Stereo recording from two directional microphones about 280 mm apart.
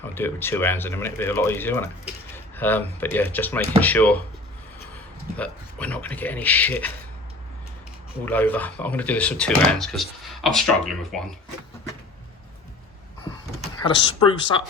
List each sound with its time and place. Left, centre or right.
0.0 s speech: centre
5.4 s speech: centre
8.2 s speech: centre
13.8 s speech: centre